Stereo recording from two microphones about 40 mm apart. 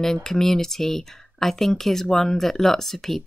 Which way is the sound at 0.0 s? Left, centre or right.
Centre.